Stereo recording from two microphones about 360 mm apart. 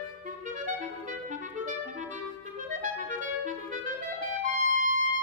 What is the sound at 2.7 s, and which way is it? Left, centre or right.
Clarinet, right.